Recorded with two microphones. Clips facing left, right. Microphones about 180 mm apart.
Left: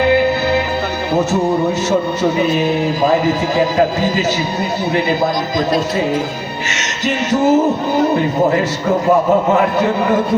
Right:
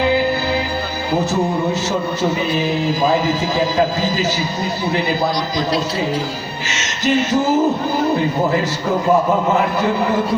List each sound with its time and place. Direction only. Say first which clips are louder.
5.2 s a man's voice: left 3 dB; 50° left (ahead or behind)
7.0 s music: left 1 dB; 20° left (ahead or behind)